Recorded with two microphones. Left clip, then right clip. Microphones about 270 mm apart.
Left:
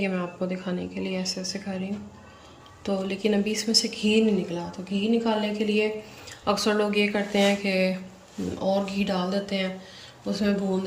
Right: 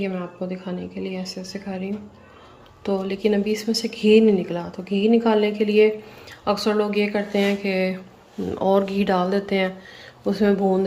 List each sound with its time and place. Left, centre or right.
0.0 s speech: centre
2.8 s a woman's voice: centre